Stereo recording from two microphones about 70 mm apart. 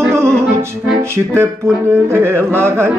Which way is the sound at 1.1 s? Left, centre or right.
Right.